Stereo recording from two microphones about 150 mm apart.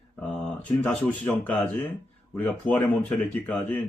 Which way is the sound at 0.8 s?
10° left (ahead or behind).